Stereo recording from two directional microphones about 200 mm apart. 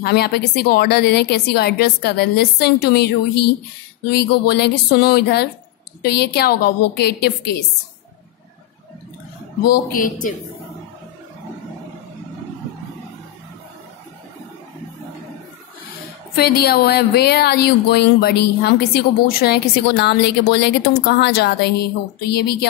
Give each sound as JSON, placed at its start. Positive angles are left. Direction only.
{"t": 0.0, "sound": "speech", "side_deg": 55}
{"t": 4.1, "sound": "speech", "side_deg": 55}
{"t": 9.7, "sound": "speech", "side_deg": 45}
{"t": 16.3, "sound": "speech", "side_deg": 50}